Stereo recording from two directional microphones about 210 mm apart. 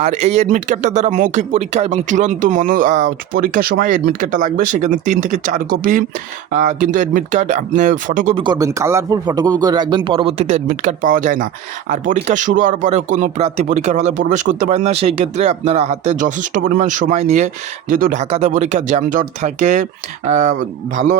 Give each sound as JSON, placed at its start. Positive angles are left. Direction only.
{"t": 0.0, "sound": "speech", "side_deg": -30}
{"t": 8.4, "sound": "speech", "side_deg": -20}